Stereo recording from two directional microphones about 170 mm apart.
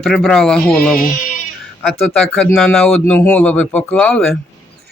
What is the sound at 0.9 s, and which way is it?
Music, 55° left (ahead or behind).